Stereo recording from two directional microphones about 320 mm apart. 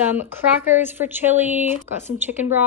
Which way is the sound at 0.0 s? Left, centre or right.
Centre.